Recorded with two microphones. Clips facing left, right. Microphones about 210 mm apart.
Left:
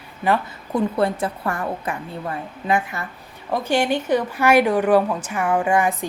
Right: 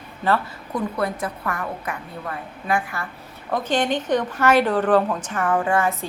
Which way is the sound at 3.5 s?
10° left (ahead or behind).